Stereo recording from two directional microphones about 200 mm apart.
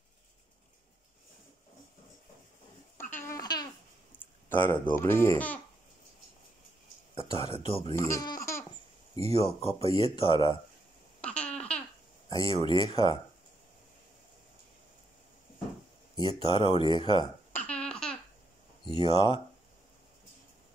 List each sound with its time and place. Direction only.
3.3 s babbling: 20° left (ahead or behind)
4.2 s a sound: 10° left (ahead or behind)
4.9 s speech: 10° left (ahead or behind)
7.3 s speech: 25° left (ahead or behind)
7.9 s speech: 15° left (ahead or behind)
9.3 s speech: 30° left (ahead or behind)
11.1 s babbling: 5° left (ahead or behind)
12.3 s speech: 25° left (ahead or behind)
16.2 s speech: 20° left (ahead or behind)
17.5 s babbling: 5° left (ahead or behind)
18.9 s speech: 30° left (ahead or behind)